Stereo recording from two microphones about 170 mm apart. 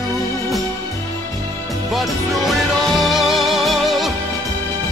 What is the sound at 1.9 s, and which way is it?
Music, centre (ahead or behind).